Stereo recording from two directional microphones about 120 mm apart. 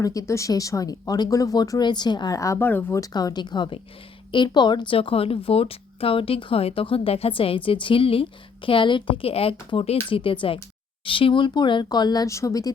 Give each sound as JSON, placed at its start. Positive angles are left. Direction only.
{"t": 0.0, "sound": "speech", "side_deg": 30}
{"t": 3.0, "sound": "speech", "side_deg": 30}